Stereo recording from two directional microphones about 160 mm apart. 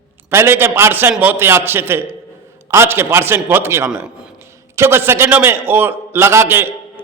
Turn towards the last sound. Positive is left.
turn(degrees=-15)  # may be behind; listen again after turning